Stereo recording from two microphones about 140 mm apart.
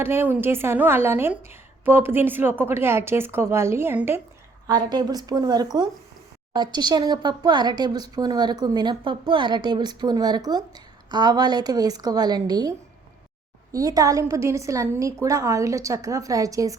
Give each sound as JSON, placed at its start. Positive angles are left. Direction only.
{"t": 0.0, "sound": "a woman's voice", "side_deg": -15}
{"t": 4.6, "sound": "a woman's voice", "side_deg": -30}
{"t": 13.7, "sound": "a woman's voice", "side_deg": -25}